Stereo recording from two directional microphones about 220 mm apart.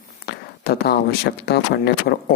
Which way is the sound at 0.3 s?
45° left (ahead or behind).